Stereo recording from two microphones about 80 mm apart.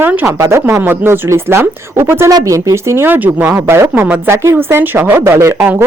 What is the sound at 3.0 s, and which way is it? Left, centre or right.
A woman's voice, right.